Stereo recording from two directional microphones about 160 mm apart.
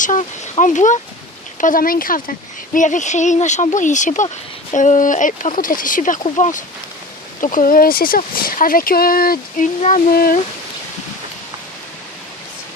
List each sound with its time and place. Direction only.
0.0 s speech: 50° left (ahead or behind)
7.4 s speech: 60° left (ahead or behind)